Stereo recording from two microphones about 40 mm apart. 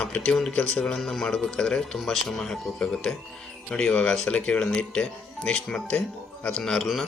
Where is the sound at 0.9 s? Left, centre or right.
Centre.